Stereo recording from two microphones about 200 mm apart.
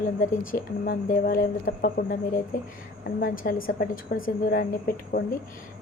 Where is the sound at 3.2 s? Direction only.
45° left (ahead or behind).